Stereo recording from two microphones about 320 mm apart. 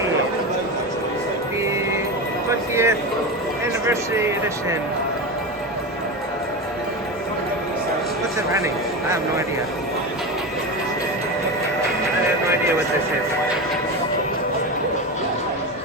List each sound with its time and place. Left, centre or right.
2.5 s speech: centre
8.5 s speech: centre